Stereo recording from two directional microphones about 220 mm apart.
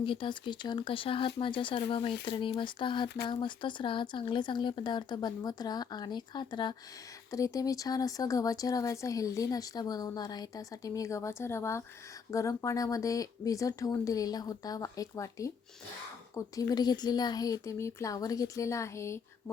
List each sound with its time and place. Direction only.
0.0 s speech: 25° left (ahead or behind)